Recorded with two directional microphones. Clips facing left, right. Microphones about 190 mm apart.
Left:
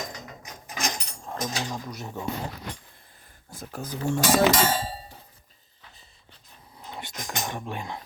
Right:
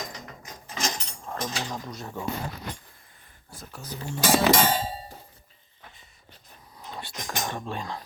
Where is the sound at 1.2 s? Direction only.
15° left (ahead or behind).